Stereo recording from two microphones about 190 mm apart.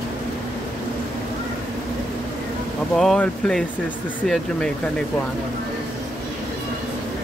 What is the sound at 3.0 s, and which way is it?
Speech, 5° left (ahead or behind).